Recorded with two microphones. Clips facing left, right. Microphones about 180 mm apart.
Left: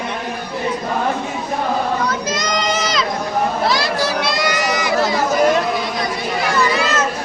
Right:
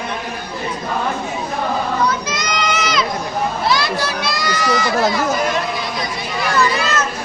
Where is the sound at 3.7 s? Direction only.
35° left (ahead or behind); by 4.9 s 20° left (ahead or behind).